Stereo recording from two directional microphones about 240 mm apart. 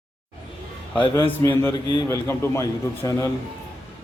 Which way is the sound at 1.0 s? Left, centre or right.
Centre.